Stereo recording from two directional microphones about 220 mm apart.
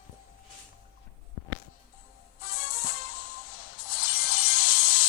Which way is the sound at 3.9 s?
45° left (ahead or behind).